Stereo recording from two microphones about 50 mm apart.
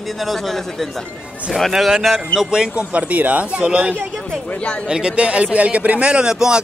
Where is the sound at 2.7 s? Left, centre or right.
Right.